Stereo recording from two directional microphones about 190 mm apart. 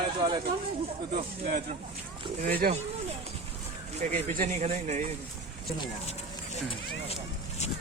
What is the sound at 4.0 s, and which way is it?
Speech, 40° right (ahead or behind).